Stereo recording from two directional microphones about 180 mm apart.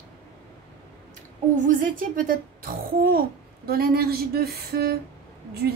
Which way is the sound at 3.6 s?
60° right (ahead or behind).